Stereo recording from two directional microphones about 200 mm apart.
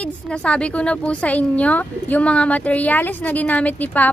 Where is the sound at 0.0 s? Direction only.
5° left (ahead or behind).